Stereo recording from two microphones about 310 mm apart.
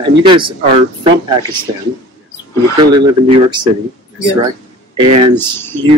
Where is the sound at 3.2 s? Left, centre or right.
Centre.